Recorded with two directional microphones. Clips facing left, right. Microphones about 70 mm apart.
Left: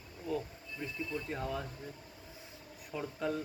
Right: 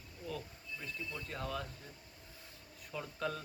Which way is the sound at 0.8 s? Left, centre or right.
Left.